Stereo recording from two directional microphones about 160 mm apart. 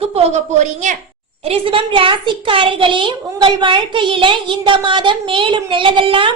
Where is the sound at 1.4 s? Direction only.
35° right (ahead or behind).